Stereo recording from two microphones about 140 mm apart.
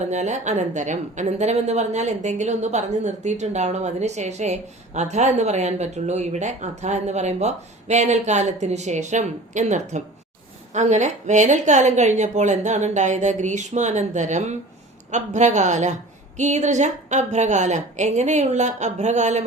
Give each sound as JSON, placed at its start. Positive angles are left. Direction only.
{"t": 0.1, "sound": "speech", "side_deg": -55}